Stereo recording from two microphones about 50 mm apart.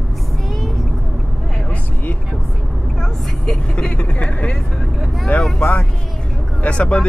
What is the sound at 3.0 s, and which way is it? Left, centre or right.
Speech, centre.